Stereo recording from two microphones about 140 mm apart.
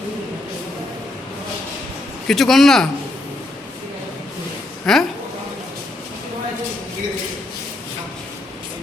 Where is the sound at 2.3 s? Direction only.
Centre (ahead or behind).